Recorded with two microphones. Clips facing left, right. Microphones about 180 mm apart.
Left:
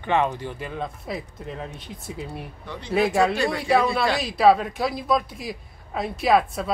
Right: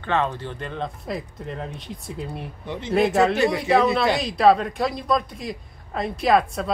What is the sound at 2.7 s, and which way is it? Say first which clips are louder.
Speech: right 4 dB; 20° right (ahead or behind).